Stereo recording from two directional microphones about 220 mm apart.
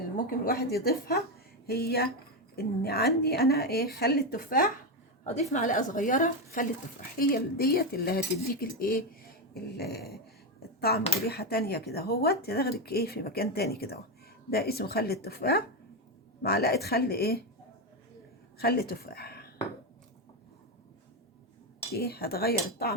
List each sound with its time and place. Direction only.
0.3 s a woman's voice: 40° left (ahead or behind)
18.6 s speech: 45° left (ahead or behind)
21.9 s speech: 45° left (ahead or behind)